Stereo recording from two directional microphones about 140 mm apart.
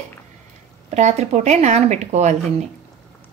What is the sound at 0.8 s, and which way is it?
A woman's voice, 55° right (ahead or behind).